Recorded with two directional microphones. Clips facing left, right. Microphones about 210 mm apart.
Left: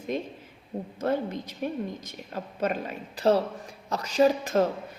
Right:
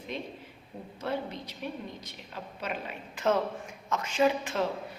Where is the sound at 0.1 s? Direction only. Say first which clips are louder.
Left 4 dB; 45° left (ahead or behind).